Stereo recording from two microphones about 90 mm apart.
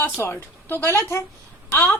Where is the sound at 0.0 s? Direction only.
25° left (ahead or behind).